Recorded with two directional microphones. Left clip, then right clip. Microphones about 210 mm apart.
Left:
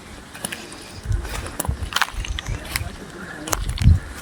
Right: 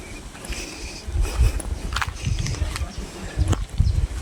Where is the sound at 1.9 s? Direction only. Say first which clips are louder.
Left 5 dB; 50° left (ahead or behind).